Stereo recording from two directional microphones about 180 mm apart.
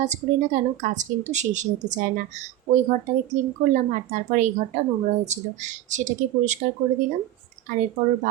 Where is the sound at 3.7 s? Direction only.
40° right (ahead or behind).